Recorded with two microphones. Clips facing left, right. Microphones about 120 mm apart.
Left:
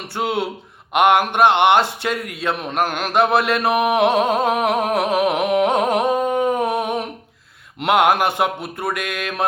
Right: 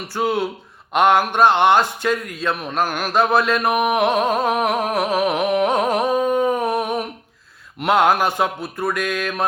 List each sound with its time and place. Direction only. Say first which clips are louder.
0.1 s a man's voice: right 1 dB; 25° left (ahead or behind)
3.5 s a sound: left 1 dB; 25° left (ahead or behind)
7.8 s a man's voice: even; 20° left (ahead or behind)